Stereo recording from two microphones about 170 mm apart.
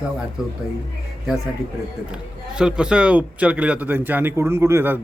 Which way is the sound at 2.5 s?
5° right (ahead or behind).